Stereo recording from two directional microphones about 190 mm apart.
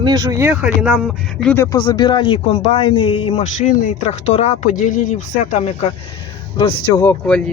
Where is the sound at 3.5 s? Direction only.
40° left (ahead or behind).